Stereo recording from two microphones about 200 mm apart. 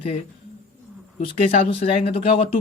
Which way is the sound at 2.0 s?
30° left (ahead or behind).